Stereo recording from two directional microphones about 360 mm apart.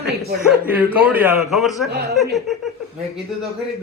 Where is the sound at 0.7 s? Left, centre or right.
Centre.